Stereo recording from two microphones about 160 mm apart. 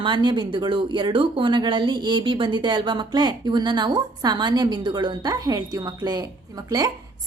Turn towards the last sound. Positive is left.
turn(degrees=-20)  # may be behind; listen again after turning